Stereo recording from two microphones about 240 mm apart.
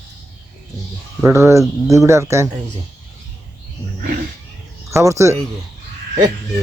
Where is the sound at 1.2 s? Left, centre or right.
Centre.